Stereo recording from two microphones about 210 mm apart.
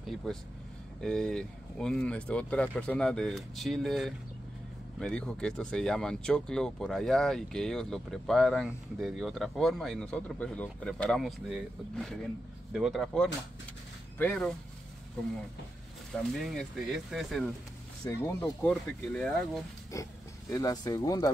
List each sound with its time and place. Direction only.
0.0 s speech: centre (ahead or behind)
16.3 s speech: centre (ahead or behind)
18.0 s speech: 15° left (ahead or behind)
18.4 s speech: 5° left (ahead or behind)
20.5 s speech: 20° left (ahead or behind)